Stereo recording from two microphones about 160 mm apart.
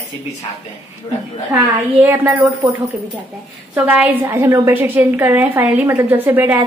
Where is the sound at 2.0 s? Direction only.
15° right (ahead or behind).